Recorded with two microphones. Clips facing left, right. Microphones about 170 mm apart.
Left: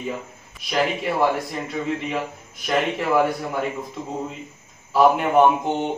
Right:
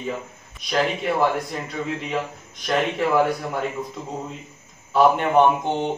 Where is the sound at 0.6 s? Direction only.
5° left (ahead or behind).